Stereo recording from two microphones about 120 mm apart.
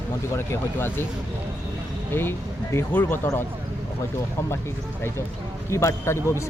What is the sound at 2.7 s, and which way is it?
Speech, 20° left (ahead or behind).